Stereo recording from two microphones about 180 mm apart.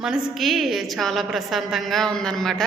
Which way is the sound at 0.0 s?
Centre (ahead or behind).